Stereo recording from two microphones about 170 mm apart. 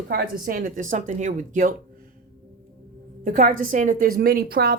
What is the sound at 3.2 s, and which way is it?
A woman's voice, 55° right (ahead or behind).